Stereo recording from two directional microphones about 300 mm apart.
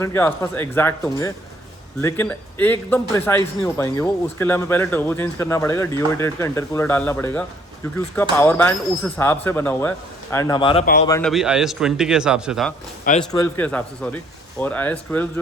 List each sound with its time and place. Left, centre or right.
0.0 s a man's voice: centre
11.3 s speech: centre